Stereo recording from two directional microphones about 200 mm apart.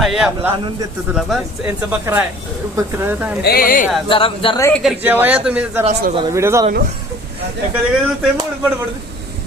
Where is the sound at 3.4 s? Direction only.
45° left (ahead or behind).